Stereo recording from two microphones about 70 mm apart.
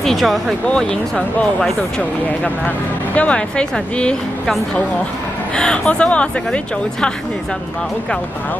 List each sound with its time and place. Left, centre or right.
0.0 s speech: centre
2.0 s speech: centre
5.6 s speech: centre